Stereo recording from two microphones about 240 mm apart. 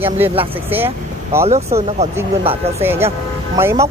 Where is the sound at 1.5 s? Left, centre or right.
Right.